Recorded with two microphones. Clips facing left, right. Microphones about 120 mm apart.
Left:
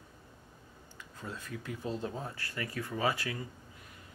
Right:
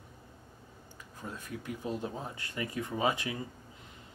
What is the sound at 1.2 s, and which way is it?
Speech, 15° right (ahead or behind).